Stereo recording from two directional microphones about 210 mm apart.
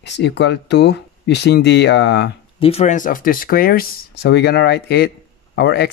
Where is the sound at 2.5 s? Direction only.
30° left (ahead or behind).